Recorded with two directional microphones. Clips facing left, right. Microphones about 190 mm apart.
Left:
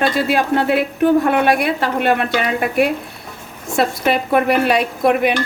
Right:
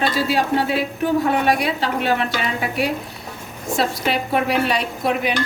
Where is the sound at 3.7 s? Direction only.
55° left (ahead or behind).